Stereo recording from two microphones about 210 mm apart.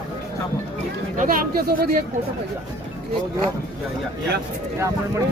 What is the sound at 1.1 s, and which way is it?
Speech, 45° right (ahead or behind).